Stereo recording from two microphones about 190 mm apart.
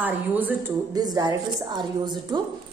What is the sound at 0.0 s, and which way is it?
Speech, 10° right (ahead or behind).